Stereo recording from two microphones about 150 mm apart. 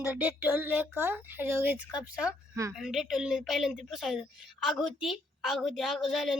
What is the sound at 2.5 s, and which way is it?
Speech, 20° right (ahead or behind).